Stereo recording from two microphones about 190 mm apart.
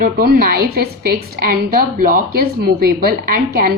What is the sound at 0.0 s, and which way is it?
A woman's voice, 50° right (ahead or behind).